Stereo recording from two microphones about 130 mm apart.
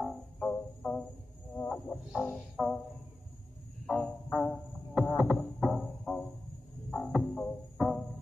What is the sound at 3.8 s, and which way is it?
Music, centre (ahead or behind).